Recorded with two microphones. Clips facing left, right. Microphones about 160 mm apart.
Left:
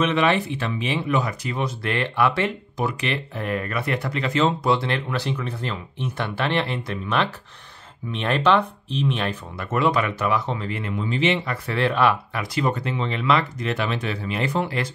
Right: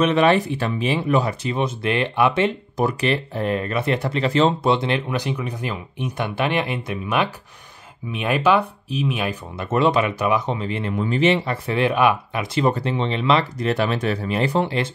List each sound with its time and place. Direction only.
0.0 s speech: 40° right (ahead or behind); by 2.5 s 20° right (ahead or behind)
2.8 s speech: 35° right (ahead or behind)
4.7 s speech: 20° right (ahead or behind)
9.6 s speech: 25° right (ahead or behind)
10.8 s speech: 40° right (ahead or behind); by 12.6 s 20° right (ahead or behind)
12.6 s speech: 30° right (ahead or behind)
13.6 s speech: 35° right (ahead or behind)